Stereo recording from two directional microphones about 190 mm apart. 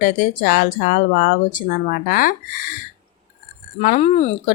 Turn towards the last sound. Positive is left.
turn(degrees=35)  # may be behind; listen again after turning